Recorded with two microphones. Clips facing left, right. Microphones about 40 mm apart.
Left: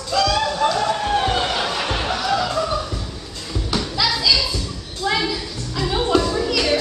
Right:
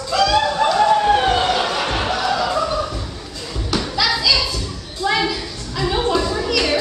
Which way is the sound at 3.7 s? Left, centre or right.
Centre.